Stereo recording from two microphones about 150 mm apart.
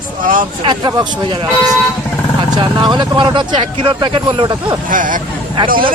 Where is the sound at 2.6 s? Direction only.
30° right (ahead or behind).